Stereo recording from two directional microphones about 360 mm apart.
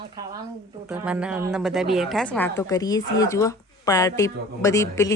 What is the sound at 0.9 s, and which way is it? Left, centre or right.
A woman's voice, centre.